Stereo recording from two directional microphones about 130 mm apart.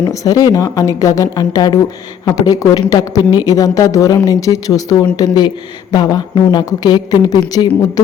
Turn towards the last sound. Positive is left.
turn(degrees=30)  # may be behind; listen again after turning